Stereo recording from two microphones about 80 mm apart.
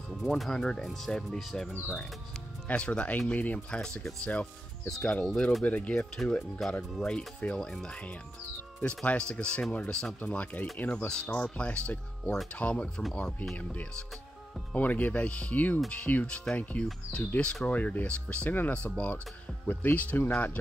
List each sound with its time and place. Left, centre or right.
0.1 s speech: centre
2.7 s speech: centre